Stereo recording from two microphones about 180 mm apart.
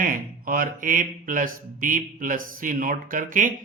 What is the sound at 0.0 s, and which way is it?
Speech, 50° right (ahead or behind).